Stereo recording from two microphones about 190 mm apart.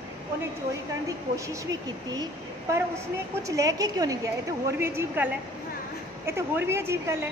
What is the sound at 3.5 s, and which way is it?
A woman's voice, 15° right (ahead or behind).